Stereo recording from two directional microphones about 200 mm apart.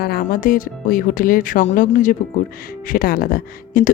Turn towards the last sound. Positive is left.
turn(degrees=45)  # may be behind; listen again after turning